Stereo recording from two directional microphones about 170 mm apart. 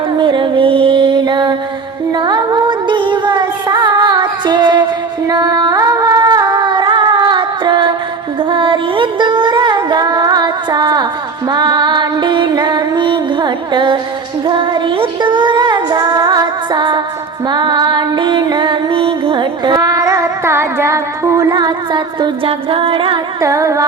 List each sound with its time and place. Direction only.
0.2 s music: 30° right (ahead or behind)
23.4 s music: 20° right (ahead or behind)